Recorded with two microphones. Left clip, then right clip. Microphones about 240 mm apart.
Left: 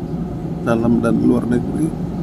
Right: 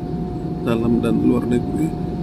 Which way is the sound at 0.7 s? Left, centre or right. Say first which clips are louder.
Left 3 dB; centre.